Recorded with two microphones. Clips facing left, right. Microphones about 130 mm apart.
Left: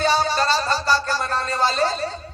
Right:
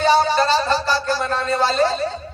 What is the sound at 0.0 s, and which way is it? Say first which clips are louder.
Music: right 4 dB; 40° right (ahead or behind).